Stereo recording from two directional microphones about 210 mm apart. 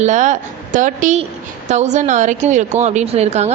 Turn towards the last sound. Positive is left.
turn(degrees=-30)  # may be behind; listen again after turning